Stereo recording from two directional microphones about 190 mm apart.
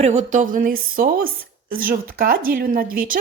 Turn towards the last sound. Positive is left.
turn(degrees=-50)  # may be behind; listen again after turning